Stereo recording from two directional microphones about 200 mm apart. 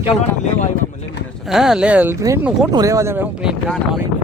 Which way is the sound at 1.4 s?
Centre (ahead or behind).